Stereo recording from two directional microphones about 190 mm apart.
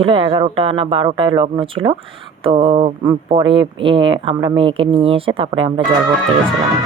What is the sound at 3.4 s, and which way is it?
Speech, 25° right (ahead or behind).